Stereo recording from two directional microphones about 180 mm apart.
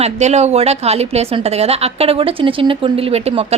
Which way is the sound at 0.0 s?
40° right (ahead or behind).